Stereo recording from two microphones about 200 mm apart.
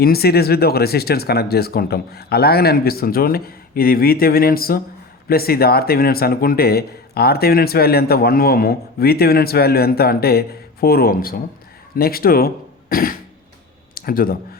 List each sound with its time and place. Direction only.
0.0 s a man's voice: 50° left (ahead or behind)
12.9 s throat clearing: 45° left (ahead or behind)
13.9 s speech: 45° left (ahead or behind)